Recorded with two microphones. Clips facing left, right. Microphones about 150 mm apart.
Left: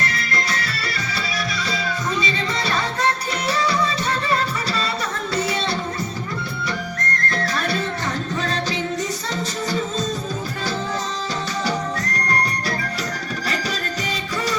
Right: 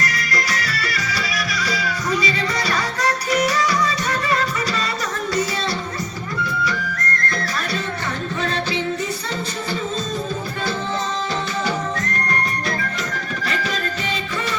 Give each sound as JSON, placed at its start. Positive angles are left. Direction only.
{"t": 0.0, "sound": "music", "side_deg": 30}
{"t": 13.4, "sound": "music", "side_deg": 35}